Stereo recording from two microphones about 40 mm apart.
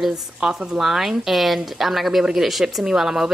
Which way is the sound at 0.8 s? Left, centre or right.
Centre.